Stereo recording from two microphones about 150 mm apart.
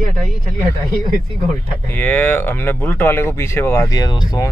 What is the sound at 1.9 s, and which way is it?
Speech, 10° left (ahead or behind).